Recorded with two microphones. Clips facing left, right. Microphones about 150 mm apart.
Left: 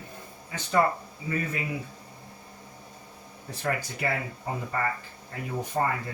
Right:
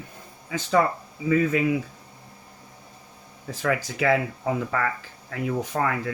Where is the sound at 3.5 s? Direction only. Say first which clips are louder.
Right 5 dB; 90° right.